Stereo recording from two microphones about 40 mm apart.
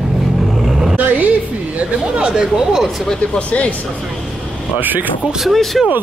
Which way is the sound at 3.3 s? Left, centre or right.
Left.